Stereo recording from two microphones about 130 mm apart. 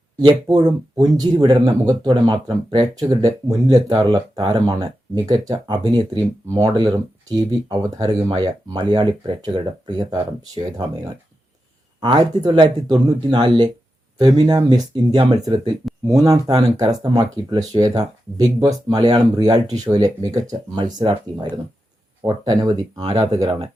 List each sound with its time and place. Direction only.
0.3 s speech: 30° right (ahead or behind)